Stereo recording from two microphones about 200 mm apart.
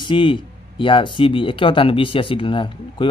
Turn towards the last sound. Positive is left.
turn(degrees=25)  # may be behind; listen again after turning